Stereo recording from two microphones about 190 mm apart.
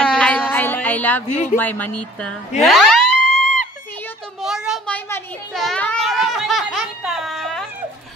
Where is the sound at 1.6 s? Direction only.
10° left (ahead or behind).